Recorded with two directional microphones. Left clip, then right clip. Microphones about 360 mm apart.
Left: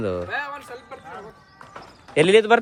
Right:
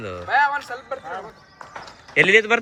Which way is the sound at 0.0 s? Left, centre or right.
Centre.